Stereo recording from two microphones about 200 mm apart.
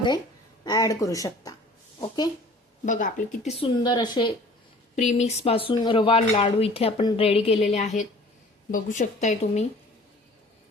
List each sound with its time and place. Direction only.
0.6 s speech: 20° left (ahead or behind)
2.8 s speech: 40° left (ahead or behind)
3.6 s speech: 20° left (ahead or behind)
4.9 s speech: 35° left (ahead or behind)